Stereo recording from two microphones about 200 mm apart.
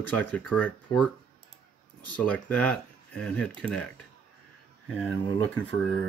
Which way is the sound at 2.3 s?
5° left (ahead or behind).